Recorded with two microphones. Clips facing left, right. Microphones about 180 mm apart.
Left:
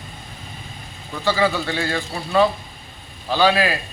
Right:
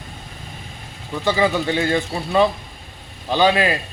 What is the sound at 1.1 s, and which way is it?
A man's voice, 20° right (ahead or behind).